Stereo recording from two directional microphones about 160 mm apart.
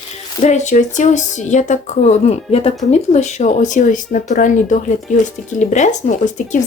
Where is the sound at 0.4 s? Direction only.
45° left (ahead or behind).